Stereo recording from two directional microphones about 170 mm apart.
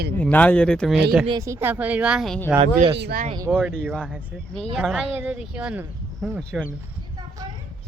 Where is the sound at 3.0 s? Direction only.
65° right (ahead or behind).